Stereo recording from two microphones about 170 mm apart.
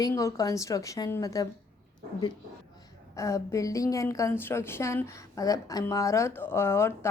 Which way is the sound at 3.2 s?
20° left (ahead or behind).